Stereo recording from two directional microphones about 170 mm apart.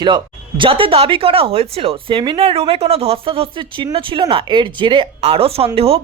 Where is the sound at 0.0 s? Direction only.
25° right (ahead or behind).